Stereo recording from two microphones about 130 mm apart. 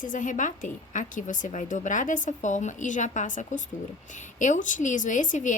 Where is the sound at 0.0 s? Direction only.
85° left.